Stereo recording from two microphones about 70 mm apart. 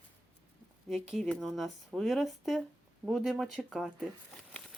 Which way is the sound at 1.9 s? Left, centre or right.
Centre.